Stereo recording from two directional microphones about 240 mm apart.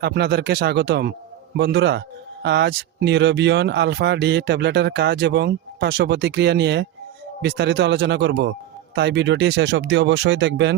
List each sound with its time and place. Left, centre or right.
0.0 s speech: right